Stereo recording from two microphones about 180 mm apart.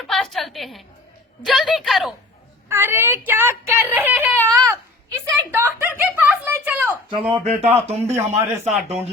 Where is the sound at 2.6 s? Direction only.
15° right (ahead or behind).